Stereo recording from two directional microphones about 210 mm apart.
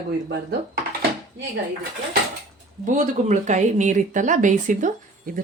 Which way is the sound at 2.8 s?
35° right (ahead or behind).